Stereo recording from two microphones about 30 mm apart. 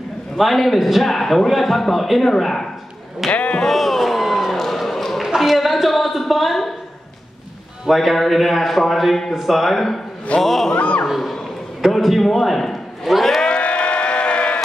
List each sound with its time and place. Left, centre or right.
0.4 s a man's voice: centre
1.1 s a man's voice: centre
2.2 s speech: centre
3.3 s speech: left
3.6 s a sound: centre
5.3 s speech: centre
7.8 s a man's voice: centre
10.8 s a sound: left
11.1 s a man's voice: centre
13.5 s a sound: left